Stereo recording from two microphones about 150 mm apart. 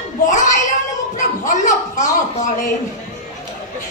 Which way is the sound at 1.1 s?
55° left (ahead or behind).